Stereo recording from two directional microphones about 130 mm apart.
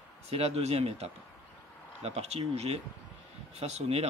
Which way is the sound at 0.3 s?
55° right (ahead or behind).